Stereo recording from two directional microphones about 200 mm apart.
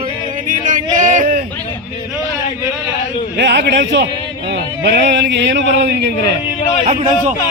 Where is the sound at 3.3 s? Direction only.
60° right (ahead or behind).